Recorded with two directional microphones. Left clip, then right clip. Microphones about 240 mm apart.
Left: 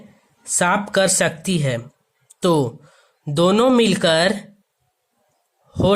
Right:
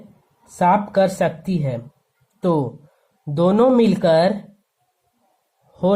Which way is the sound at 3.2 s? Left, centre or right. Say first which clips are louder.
Even; left.